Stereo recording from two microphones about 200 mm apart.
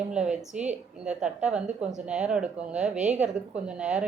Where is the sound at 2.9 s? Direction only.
35° right (ahead or behind).